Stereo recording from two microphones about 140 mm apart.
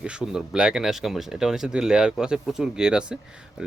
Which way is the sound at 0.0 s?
5° right (ahead or behind).